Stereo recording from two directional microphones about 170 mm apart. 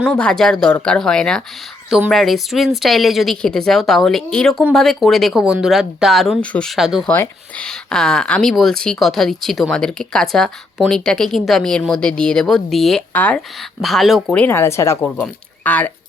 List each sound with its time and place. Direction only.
0.0 s speech: 5° left (ahead or behind)
14.4 s speech: 15° left (ahead or behind)